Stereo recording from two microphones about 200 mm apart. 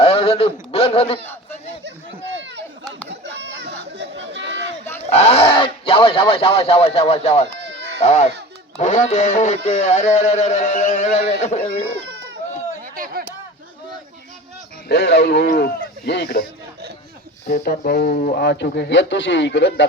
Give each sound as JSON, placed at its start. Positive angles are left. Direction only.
{"t": 0.0, "sound": "a sound", "side_deg": 30}
{"t": 1.2, "sound": "speech", "side_deg": 10}
{"t": 3.1, "sound": "chatter", "side_deg": -60}
{"t": 5.0, "sound": "speech", "side_deg": 30}
{"t": 7.7, "sound": "a sound", "side_deg": -60}
{"t": 8.0, "sound": "music", "side_deg": 35}
{"t": 12.8, "sound": "a sound", "side_deg": -45}
{"t": 14.8, "sound": "speech", "side_deg": 55}
{"t": 17.5, "sound": "speech", "side_deg": 50}